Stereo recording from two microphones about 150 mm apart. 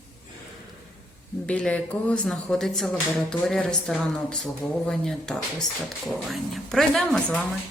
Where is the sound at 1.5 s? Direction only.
10° left (ahead or behind).